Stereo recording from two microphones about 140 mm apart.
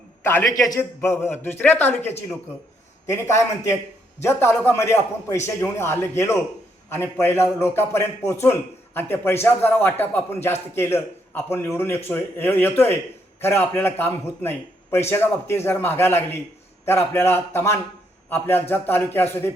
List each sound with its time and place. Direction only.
0.2 s a man's voice: 15° left (ahead or behind)